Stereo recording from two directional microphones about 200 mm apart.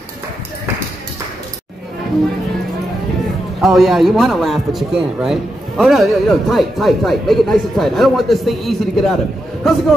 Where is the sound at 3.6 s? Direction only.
Centre (ahead or behind).